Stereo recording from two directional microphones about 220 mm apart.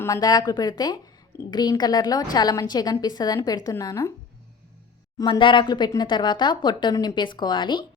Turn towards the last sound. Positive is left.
turn(degrees=20)  # may be behind; listen again after turning